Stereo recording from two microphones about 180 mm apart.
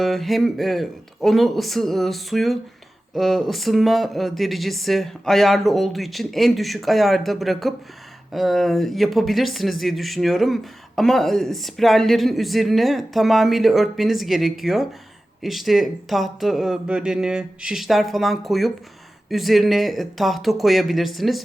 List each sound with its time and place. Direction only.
0.0 s speech: centre (ahead or behind)